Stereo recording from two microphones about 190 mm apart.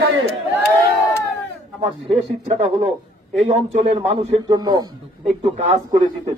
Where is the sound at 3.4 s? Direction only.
35° right (ahead or behind).